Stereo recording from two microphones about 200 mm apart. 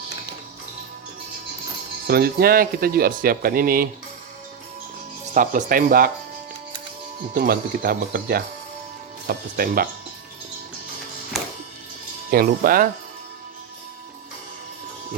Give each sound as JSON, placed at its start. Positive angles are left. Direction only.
{"t": 2.0, "sound": "speech", "side_deg": -50}
{"t": 5.3, "sound": "speech", "side_deg": -40}
{"t": 7.3, "sound": "speech", "side_deg": -45}
{"t": 11.3, "sound": "music", "side_deg": 0}
{"t": 12.3, "sound": "speech", "side_deg": -45}